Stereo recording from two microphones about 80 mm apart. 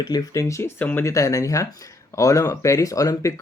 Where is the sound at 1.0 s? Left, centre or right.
Left.